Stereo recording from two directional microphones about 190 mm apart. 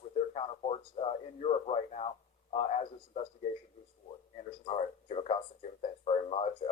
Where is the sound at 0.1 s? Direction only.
35° left (ahead or behind).